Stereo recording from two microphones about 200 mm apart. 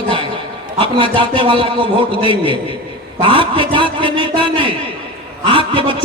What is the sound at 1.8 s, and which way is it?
A man's voice, 25° right (ahead or behind).